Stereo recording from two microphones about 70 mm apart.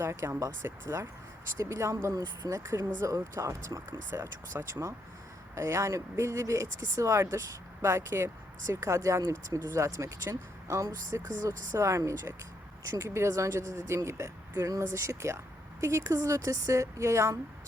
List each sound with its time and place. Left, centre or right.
0.0 s speech: right
4.1 s speech: right